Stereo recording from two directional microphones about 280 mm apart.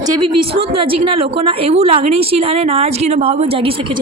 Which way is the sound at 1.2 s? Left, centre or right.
Centre.